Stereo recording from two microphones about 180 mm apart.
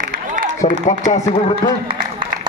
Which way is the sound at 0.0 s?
50° right (ahead or behind).